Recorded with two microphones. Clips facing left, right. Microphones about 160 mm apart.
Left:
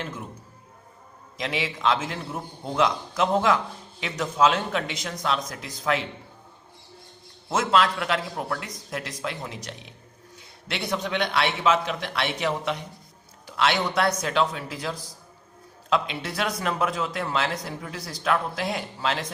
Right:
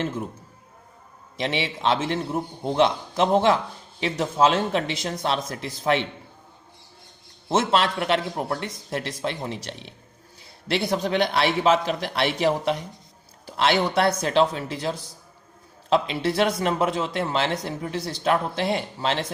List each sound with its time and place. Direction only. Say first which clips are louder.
0.0 s speech: right 7 dB; 30° right (ahead or behind)
1.4 s speech: right 2 dB; 30° right (ahead or behind)
7.5 s a man's voice: right 1 dB; 30° right (ahead or behind)